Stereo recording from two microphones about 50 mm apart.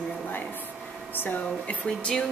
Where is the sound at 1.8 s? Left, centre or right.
Left.